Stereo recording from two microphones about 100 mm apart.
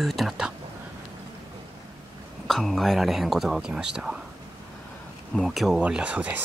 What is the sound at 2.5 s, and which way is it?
Speech, centre (ahead or behind).